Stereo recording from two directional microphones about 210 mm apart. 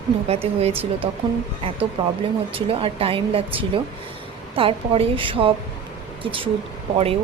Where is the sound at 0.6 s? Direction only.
25° right (ahead or behind).